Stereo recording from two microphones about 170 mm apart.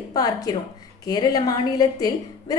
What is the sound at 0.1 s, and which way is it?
A woman's voice, 20° left (ahead or behind).